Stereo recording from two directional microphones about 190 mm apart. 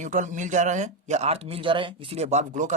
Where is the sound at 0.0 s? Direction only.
40° right (ahead or behind).